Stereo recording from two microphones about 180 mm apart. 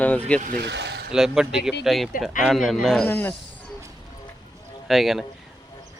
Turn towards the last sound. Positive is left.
turn(degrees=0)  # may be behind; listen again after turning